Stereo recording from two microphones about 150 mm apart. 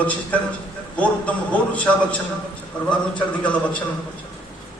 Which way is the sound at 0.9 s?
10° left (ahead or behind).